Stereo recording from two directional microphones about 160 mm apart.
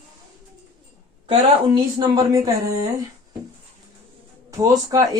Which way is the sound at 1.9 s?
20° right (ahead or behind).